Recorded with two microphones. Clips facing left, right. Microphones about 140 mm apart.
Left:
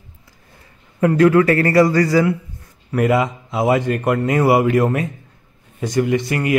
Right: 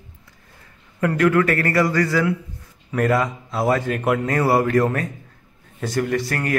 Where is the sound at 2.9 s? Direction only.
15° left (ahead or behind).